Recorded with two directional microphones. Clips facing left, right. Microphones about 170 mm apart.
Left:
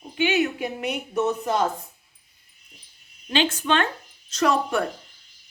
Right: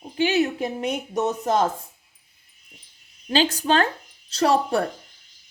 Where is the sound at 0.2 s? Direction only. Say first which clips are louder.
Right 1 dB; 35° right (ahead or behind).